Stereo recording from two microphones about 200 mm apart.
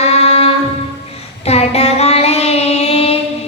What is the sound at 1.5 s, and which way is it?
Child singing, 30° left (ahead or behind).